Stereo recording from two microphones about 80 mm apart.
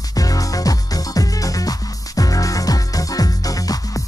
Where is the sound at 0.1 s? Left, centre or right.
Left.